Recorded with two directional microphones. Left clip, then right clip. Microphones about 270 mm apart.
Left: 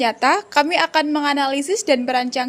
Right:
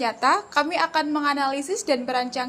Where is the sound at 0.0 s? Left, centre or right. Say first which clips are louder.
Left 4 dB; left.